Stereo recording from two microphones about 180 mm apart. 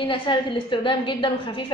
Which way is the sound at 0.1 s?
25° left (ahead or behind).